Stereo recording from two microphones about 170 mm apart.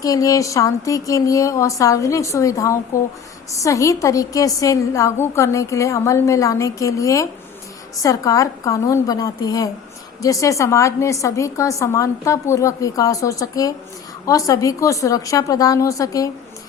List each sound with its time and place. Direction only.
0.0 s a woman's voice: 20° left (ahead or behind)